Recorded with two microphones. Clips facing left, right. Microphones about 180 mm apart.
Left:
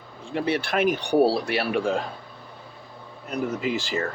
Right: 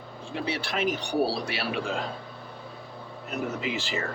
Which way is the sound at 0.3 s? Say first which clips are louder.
Left 6 dB; 55° left (ahead or behind).